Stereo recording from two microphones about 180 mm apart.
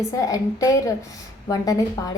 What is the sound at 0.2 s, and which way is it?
A woman's voice, 20° left (ahead or behind).